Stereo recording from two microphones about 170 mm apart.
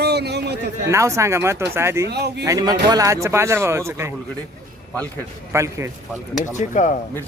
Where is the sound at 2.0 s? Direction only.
75° right (ahead or behind).